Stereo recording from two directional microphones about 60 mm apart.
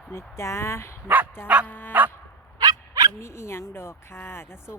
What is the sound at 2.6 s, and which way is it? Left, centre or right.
Dog, right.